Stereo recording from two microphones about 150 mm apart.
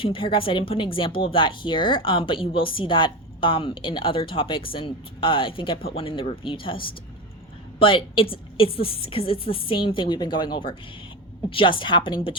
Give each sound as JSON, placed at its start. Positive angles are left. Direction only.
{"t": 0.0, "sound": "speech", "side_deg": 35}